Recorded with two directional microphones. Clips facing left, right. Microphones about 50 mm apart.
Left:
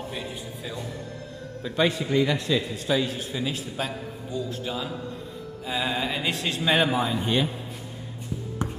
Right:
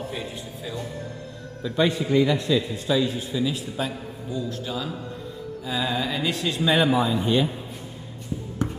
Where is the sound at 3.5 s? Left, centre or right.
Left.